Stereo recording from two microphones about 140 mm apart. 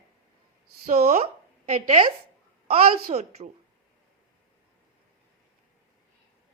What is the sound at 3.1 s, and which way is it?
Speech, 45° right (ahead or behind).